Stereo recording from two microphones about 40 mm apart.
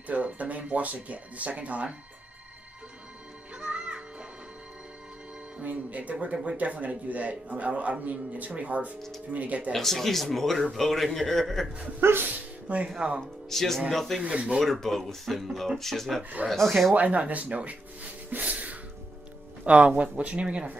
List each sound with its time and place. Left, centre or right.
0.0 s a man's voice: right
3.5 s music: right
5.6 s a man's voice: right
9.7 s speech: centre
12.0 s speech: right
12.3 s speech: right
13.2 s speech: centre
14.2 s speech: right
14.6 s speech: centre
16.9 s a man's voice: right
18.3 s a sound: right
19.6 s a man's voice: right